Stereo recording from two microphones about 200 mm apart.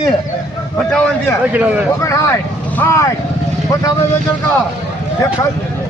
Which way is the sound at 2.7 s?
15° left (ahead or behind).